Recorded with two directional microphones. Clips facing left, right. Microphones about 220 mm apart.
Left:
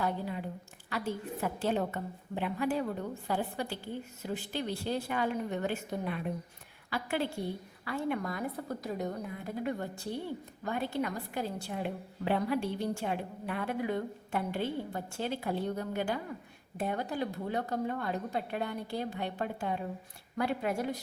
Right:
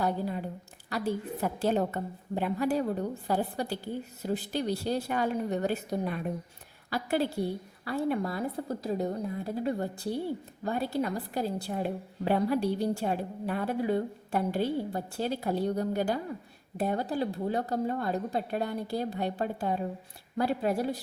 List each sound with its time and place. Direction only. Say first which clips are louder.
0.0 s a woman's voice: right 4 dB; 40° right (ahead or behind)